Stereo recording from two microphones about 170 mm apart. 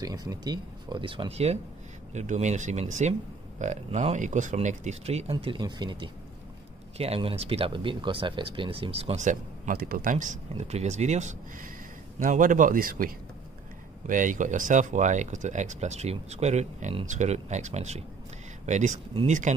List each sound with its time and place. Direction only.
0.0 s speech: 20° right (ahead or behind); by 19.5 s 45° right (ahead or behind)